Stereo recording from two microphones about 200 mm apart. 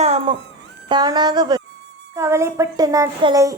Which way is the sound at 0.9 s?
20° right (ahead or behind).